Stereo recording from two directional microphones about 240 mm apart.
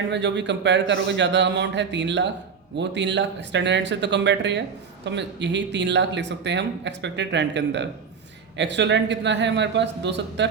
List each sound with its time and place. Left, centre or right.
0.1 s speech: right